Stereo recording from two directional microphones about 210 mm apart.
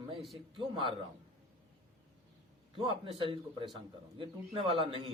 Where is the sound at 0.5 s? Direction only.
25° right (ahead or behind).